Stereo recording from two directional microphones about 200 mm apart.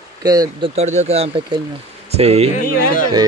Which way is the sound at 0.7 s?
35° right (ahead or behind).